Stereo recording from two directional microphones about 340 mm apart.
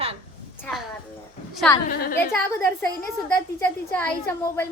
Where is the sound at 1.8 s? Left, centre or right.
Left.